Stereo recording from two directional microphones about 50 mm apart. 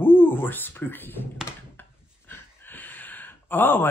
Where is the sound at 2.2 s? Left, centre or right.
Left.